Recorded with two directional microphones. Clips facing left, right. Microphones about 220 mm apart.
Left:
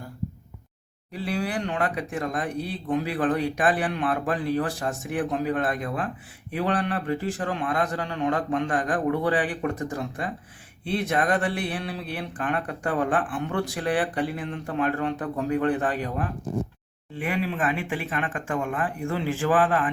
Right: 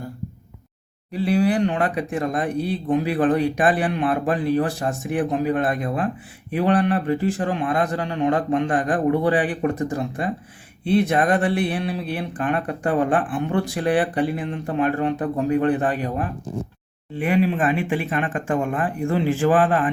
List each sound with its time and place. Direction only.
1.2 s speech: 25° right (ahead or behind)